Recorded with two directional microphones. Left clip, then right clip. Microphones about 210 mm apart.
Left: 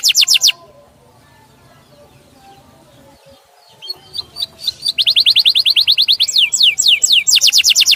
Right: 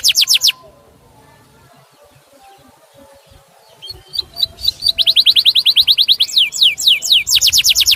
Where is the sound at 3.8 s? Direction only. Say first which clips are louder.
Right 2 dB; 10° left (ahead or behind).